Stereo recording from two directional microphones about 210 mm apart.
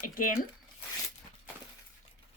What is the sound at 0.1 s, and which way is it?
Speech, 40° left (ahead or behind).